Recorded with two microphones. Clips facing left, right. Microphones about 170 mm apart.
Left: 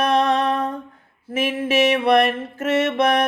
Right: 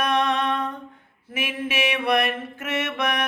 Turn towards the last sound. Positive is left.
turn(degrees=35)  # may be behind; listen again after turning